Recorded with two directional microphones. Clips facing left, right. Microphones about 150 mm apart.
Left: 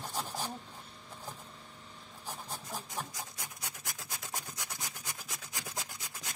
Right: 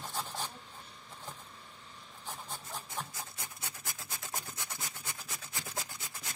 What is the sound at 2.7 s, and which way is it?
Filing, 15° left (ahead or behind).